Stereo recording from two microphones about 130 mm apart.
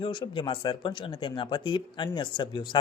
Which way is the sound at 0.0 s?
40° left (ahead or behind).